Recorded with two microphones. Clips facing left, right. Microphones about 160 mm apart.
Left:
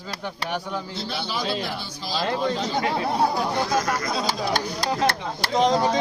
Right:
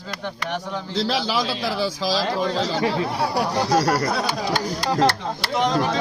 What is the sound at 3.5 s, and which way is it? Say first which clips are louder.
Speech: right 4 dB; 35° right (ahead or behind).